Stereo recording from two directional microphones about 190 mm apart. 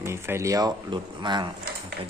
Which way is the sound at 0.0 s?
15° right (ahead or behind).